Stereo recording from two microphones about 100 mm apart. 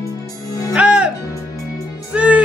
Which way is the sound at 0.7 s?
10° right (ahead or behind).